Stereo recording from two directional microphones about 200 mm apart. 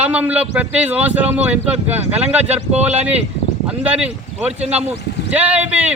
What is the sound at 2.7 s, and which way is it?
Speech, 30° right (ahead or behind).